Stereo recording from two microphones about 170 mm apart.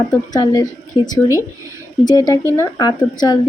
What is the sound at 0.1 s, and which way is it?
Speech, 20° left (ahead or behind).